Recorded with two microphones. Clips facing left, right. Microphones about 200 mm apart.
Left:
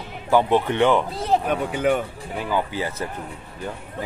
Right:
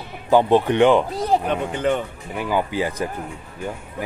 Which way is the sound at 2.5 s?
15° right (ahead or behind).